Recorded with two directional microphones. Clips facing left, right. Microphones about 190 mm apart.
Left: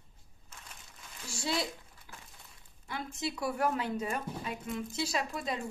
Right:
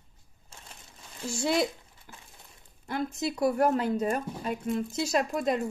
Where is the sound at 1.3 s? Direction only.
55° right (ahead or behind).